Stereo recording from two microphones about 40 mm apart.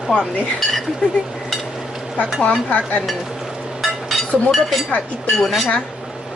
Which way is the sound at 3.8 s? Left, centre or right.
Centre.